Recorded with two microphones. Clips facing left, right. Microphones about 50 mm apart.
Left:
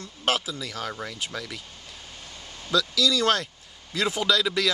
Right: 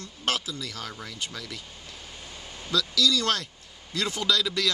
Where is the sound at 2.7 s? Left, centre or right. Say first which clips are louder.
Left 1 dB; centre.